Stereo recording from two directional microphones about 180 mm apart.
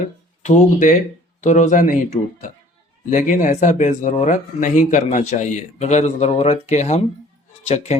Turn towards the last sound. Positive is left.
turn(degrees=35)  # may be behind; listen again after turning